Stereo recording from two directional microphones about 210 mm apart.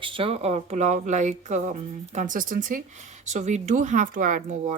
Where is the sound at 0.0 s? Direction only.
25° right (ahead or behind).